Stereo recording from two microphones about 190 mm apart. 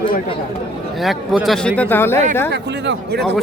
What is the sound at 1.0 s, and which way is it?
A man's voice, centre (ahead or behind).